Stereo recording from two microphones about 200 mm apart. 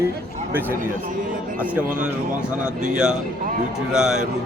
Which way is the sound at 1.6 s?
5° right (ahead or behind).